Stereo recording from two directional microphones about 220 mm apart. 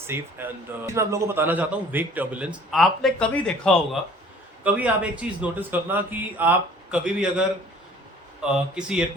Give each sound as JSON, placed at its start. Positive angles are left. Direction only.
{"t": 0.1, "sound": "a man's voice", "side_deg": -10}